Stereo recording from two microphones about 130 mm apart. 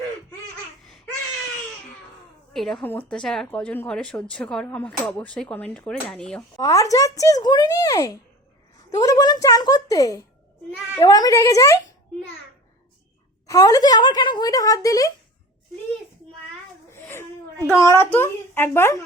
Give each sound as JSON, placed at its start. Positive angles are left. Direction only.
{"t": 2.5, "sound": "speech", "side_deg": 0}
{"t": 6.6, "sound": "speech", "side_deg": 25}
{"t": 13.5, "sound": "speech", "side_deg": 25}
{"t": 16.9, "sound": "a sound", "side_deg": 20}
{"t": 17.7, "sound": "speech", "side_deg": 20}